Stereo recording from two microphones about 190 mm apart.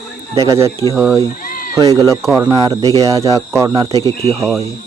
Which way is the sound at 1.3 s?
45° left (ahead or behind).